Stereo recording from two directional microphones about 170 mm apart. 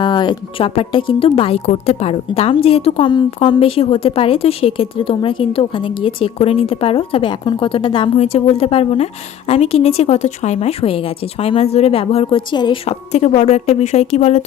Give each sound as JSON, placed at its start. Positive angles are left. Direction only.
{"t": 0.0, "sound": "speech", "side_deg": 25}